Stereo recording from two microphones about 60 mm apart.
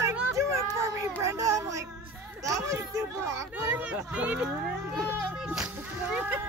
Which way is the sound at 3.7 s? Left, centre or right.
Right.